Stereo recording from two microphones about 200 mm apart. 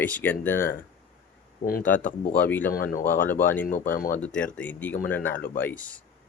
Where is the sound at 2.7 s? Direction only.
45° left (ahead or behind).